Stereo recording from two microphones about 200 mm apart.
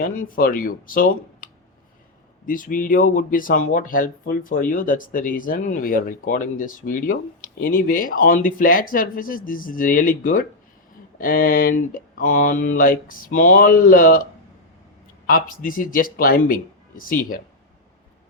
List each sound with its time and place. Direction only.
0.0 s speech: 45° left (ahead or behind)
2.5 s speech: 40° left (ahead or behind)
15.3 s speech: 45° left (ahead or behind)